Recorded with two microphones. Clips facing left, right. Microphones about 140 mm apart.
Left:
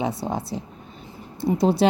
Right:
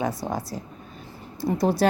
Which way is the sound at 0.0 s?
25° left (ahead or behind).